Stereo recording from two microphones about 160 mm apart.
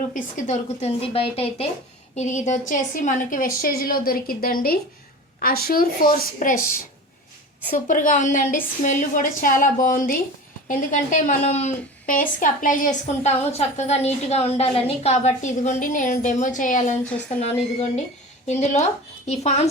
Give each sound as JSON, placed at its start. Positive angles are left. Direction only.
{"t": 0.1, "sound": "a woman's voice", "side_deg": 50}
{"t": 2.1, "sound": "a woman's voice", "side_deg": 45}
{"t": 7.7, "sound": "a woman's voice", "side_deg": 55}